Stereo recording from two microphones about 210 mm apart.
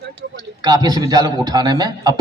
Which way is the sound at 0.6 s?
20° right (ahead or behind).